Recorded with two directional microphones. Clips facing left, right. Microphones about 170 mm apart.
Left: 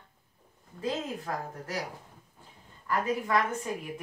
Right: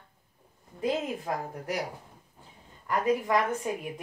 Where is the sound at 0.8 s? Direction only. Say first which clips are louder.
Right 3 dB; 15° right (ahead or behind).